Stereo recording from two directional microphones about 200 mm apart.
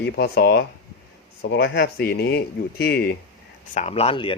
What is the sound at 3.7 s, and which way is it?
Speech, 30° left (ahead or behind).